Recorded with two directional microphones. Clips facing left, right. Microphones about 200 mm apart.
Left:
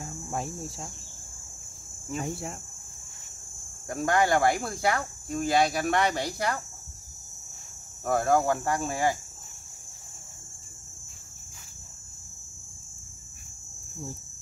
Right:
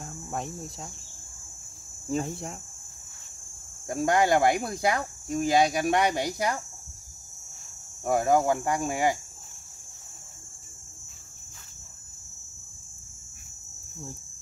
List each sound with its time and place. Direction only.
0.0 s insect: centre (ahead or behind)
2.2 s cricket: 5° left (ahead or behind)
3.8 s cricket: 20° right (ahead or behind)
8.0 s speech: 15° right (ahead or behind)